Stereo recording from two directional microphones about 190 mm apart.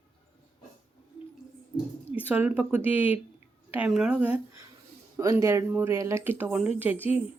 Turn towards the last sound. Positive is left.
turn(degrees=-10)  # may be behind; listen again after turning